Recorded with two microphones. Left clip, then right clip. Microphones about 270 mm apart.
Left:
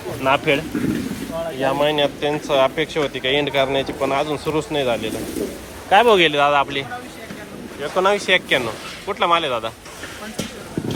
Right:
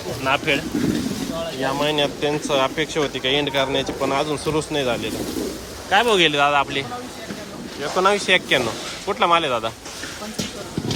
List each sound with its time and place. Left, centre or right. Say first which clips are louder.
0.3 s speech: left 3 dB; centre
1.6 s speech: left 3 dB; centre